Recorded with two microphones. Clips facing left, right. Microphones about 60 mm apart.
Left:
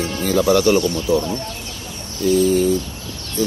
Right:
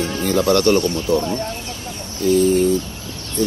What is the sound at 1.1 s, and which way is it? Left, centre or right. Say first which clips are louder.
Speech: even; right.